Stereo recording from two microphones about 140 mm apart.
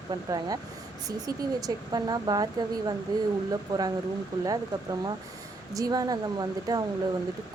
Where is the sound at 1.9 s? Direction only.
30° right (ahead or behind).